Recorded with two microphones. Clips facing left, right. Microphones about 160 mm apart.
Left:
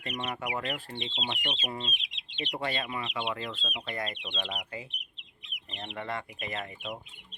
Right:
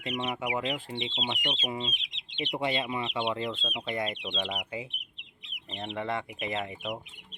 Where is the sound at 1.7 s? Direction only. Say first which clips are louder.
Right 3 dB; 15° right (ahead or behind).